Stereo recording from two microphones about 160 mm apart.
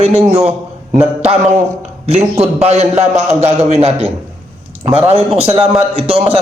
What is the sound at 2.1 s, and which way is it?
A man's voice, 40° right (ahead or behind).